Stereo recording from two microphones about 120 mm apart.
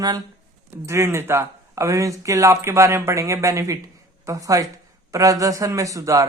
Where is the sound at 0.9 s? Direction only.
25° right (ahead or behind).